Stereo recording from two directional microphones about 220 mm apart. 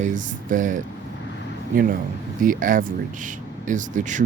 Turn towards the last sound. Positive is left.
turn(degrees=-35)  # may be behind; listen again after turning